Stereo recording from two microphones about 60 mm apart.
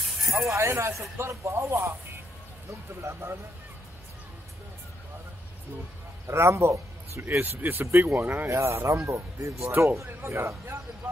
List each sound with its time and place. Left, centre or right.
0.4 s speech: right
3.0 s speech: right
6.2 s speech: right
8.5 s speech: right